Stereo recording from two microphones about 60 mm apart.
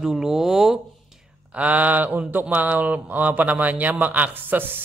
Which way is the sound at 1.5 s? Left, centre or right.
Right.